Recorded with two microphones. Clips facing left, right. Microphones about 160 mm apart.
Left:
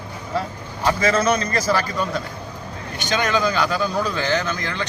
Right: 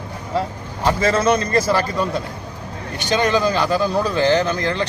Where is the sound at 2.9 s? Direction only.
30° right (ahead or behind).